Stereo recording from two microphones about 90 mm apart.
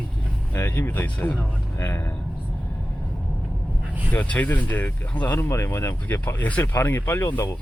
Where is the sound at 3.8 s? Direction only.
20° right (ahead or behind).